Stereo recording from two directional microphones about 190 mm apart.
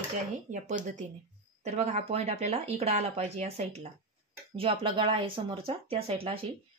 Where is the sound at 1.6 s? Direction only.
35° right (ahead or behind).